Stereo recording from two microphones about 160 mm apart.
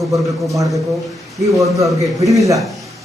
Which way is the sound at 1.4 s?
20° right (ahead or behind).